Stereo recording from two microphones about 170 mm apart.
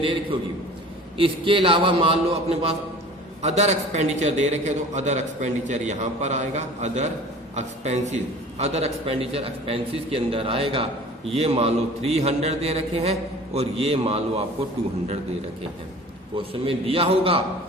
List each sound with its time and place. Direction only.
1.2 s a man's voice: 30° right (ahead or behind)
16.3 s a man's voice: 35° right (ahead or behind)